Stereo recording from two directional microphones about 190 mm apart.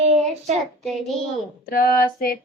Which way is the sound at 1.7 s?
50° left (ahead or behind).